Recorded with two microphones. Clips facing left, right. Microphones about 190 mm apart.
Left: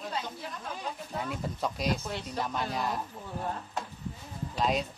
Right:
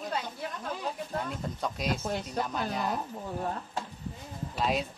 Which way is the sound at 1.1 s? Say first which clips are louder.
Right 1 dB; 5° left (ahead or behind).